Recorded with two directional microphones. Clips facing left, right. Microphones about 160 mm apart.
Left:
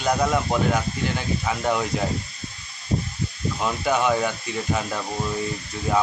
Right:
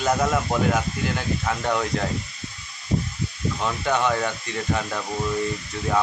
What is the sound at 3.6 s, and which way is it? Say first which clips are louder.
Speech: left 1 dB; 5° left (ahead or behind).